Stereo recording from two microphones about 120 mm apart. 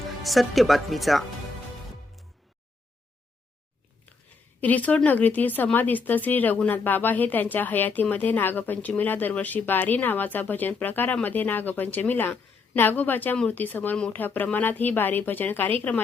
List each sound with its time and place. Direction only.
0.2 s speech: centre (ahead or behind)
4.6 s speech: 15° left (ahead or behind)